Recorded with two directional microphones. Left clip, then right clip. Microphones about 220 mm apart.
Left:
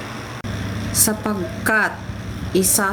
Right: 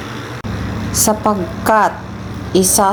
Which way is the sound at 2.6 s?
20° left (ahead or behind).